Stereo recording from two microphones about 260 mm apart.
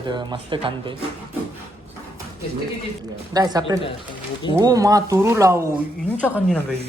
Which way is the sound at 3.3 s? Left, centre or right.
Centre.